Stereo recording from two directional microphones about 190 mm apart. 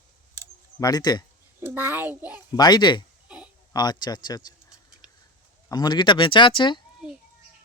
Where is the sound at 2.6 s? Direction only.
20° left (ahead or behind).